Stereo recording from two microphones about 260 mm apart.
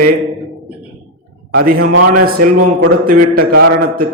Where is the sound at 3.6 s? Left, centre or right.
Right.